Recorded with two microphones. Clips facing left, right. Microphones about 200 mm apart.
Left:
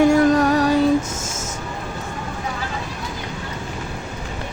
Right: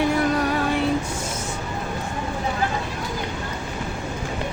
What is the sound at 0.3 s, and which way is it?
Music, 45° left (ahead or behind).